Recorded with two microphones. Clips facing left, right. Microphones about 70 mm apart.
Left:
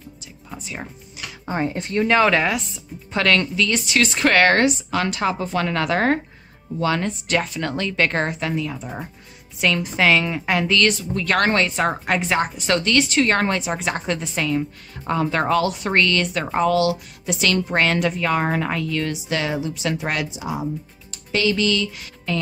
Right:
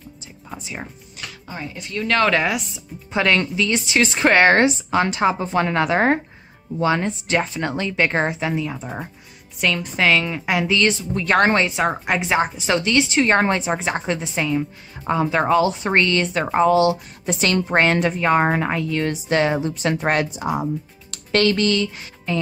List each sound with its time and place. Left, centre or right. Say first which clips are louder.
0.5 s a woman's voice: right 1 dB; centre
1.4 s speech: left 10 dB; left
2.0 s speech: even; centre
3.1 s speech: even; centre
9.6 s a woman's voice: left 1 dB; centre; by 11.7 s right
11.7 s a woman's voice: even; centre; by 22.1 s right